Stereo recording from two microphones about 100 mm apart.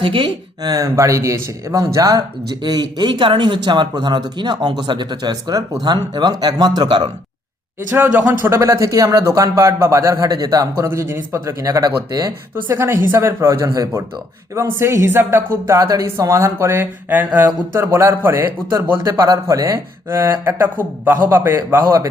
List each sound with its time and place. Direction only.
0.0 s speech: 60° right (ahead or behind)
0.6 s speech: 35° right (ahead or behind)
2.6 s speech: 45° right (ahead or behind)
7.9 s speech: 20° right (ahead or behind); by 10.8 s 35° right (ahead or behind)
10.8 s speech: 25° right (ahead or behind)
12.6 s speech: 20° right (ahead or behind)
15.8 s speech: 35° right (ahead or behind)